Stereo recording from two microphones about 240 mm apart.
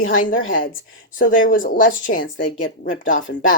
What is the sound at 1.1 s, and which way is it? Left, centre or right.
Speech, left.